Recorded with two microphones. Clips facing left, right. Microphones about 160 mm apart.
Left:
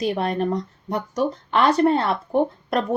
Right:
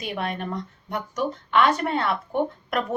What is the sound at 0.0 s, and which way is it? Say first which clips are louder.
A woman's voice: left 7 dB; 35° left (ahead or behind).